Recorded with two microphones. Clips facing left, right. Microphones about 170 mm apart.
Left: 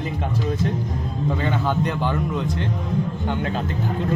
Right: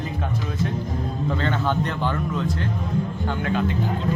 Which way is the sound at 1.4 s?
10° left (ahead or behind).